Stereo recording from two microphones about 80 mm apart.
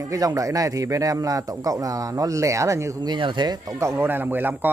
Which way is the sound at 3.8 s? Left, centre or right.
Right.